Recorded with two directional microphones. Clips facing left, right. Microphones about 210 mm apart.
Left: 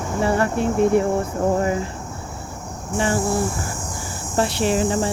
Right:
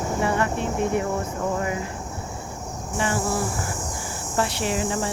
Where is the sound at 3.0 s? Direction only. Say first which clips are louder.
Left 4 dB; 30° left (ahead or behind).